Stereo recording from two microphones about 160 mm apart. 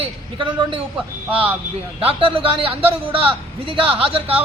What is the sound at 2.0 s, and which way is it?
A man's voice, 35° right (ahead or behind).